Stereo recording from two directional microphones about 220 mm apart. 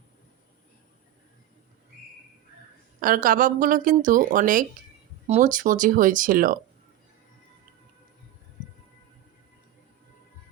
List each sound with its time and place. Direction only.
3.0 s speech: 40° right (ahead or behind)